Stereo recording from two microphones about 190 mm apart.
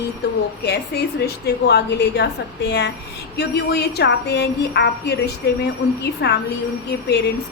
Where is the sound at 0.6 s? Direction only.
60° left (ahead or behind).